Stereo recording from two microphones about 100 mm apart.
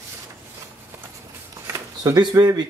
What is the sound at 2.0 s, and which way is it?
Speech, 45° right (ahead or behind).